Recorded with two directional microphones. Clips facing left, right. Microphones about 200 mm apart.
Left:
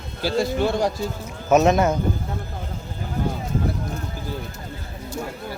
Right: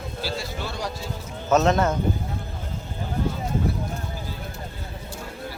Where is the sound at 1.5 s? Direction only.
15° left (ahead or behind).